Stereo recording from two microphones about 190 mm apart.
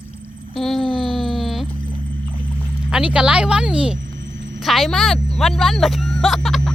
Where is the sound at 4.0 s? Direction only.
70° right (ahead or behind).